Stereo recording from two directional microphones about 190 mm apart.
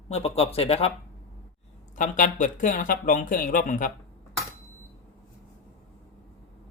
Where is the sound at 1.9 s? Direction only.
40° left (ahead or behind).